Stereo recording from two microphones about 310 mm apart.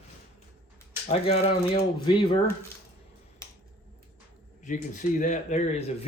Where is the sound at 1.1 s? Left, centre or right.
Centre.